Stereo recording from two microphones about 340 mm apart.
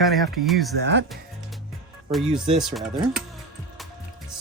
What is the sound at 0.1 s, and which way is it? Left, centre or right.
Speech, centre.